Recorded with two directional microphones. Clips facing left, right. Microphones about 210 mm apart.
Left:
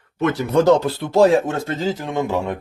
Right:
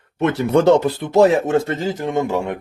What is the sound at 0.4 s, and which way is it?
Speech, 30° right (ahead or behind).